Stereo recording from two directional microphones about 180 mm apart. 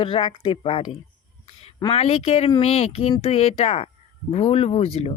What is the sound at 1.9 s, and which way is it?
Speech, 35° left (ahead or behind).